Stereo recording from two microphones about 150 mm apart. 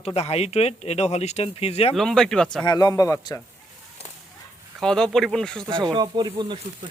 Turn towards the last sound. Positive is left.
turn(degrees=-35)  # may be behind; listen again after turning